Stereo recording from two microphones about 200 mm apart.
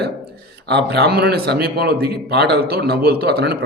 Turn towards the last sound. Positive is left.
turn(degrees=-50)  # may be behind; listen again after turning